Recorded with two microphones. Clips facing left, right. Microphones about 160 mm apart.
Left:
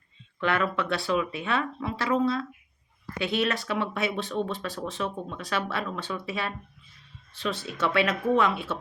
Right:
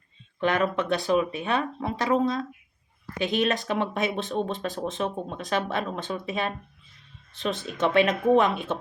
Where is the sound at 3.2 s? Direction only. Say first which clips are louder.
Right 2 dB; 20° right (ahead or behind).